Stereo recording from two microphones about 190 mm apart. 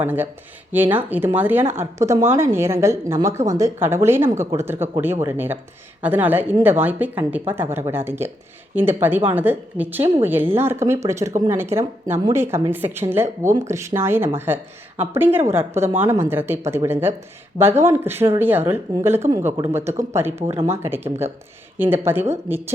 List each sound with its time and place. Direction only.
0.0 s speech: 10° right (ahead or behind)
20.4 s speech: 30° right (ahead or behind)
20.7 s speech: 10° right (ahead or behind)